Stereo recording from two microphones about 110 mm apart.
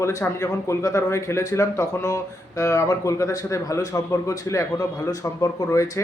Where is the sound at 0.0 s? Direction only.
25° left (ahead or behind).